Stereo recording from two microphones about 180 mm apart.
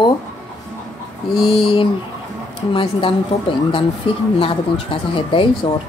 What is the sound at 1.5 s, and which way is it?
Speech, 30° left (ahead or behind).